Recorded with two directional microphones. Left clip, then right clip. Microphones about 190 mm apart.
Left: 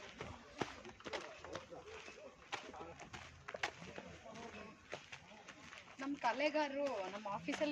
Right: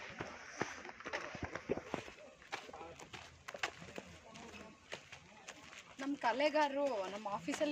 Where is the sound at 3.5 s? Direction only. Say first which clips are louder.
Even; 60° right (ahead or behind).